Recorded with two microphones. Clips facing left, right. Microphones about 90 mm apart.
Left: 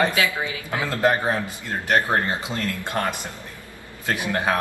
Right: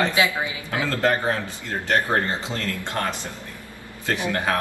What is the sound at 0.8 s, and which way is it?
Speech, 15° left (ahead or behind).